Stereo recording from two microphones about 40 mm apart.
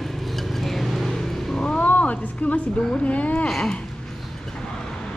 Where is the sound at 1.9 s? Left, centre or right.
Left.